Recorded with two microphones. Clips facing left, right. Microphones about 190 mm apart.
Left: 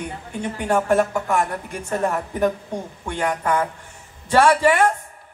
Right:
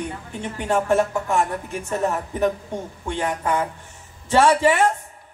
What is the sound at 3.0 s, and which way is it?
A man's voice, 20° right (ahead or behind).